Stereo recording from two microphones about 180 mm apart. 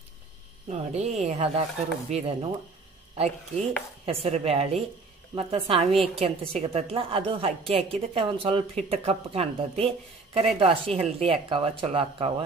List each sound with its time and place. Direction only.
0.7 s a woman's voice: 35° right (ahead or behind)
4.0 s a woman's voice: 35° right (ahead or behind)